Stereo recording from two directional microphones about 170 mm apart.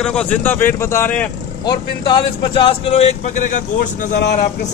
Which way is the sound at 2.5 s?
35° left (ahead or behind).